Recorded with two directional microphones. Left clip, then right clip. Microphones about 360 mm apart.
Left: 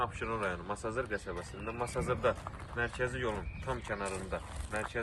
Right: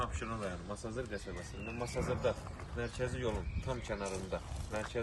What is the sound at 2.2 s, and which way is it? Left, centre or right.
Speech, centre.